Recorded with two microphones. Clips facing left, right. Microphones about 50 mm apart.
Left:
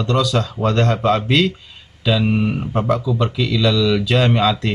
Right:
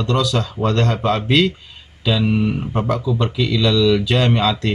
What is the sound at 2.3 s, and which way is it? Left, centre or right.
Speech, centre.